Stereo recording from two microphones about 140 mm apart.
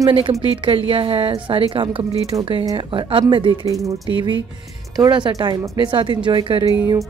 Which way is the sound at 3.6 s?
25° right (ahead or behind).